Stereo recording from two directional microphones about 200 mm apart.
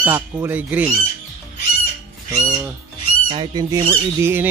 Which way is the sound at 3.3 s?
20° right (ahead or behind).